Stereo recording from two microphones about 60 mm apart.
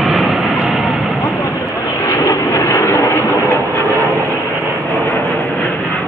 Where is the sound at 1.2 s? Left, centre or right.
Left.